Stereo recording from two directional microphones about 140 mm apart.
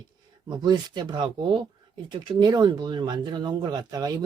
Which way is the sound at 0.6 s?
30° right (ahead or behind).